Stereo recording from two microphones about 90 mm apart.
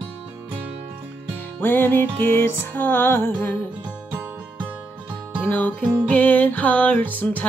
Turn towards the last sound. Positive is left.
turn(degrees=20)  # may be behind; listen again after turning